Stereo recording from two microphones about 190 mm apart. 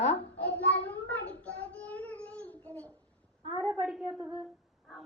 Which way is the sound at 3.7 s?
5° right (ahead or behind).